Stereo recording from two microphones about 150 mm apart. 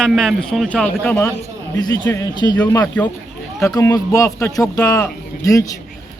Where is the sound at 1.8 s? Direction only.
20° left (ahead or behind).